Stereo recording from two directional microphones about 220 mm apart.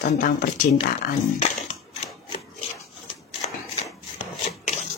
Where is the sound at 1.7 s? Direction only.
30° left (ahead or behind).